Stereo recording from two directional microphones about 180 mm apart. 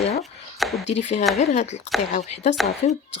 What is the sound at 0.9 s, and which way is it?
Speech, 40° left (ahead or behind).